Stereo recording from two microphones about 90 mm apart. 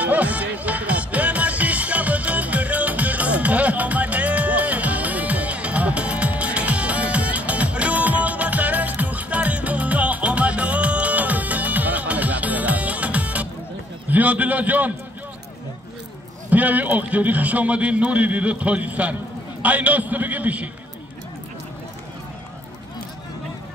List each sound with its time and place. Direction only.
0.0 s music: 15° right (ahead or behind)
14.1 s a man's voice: 15° right (ahead or behind)
16.4 s a man's voice: 20° right (ahead or behind)